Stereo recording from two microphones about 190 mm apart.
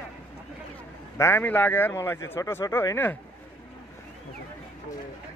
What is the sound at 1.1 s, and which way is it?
Speech, 15° left (ahead or behind).